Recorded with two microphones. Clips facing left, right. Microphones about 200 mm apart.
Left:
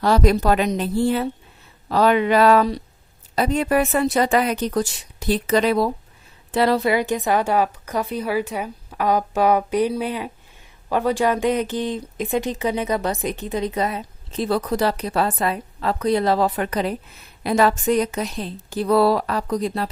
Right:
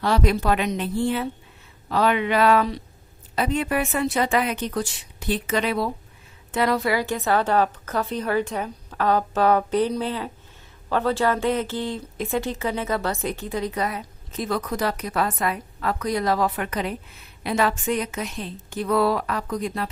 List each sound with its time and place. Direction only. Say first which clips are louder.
0.0 s a woman's voice: left 4 dB; 40° left (ahead or behind)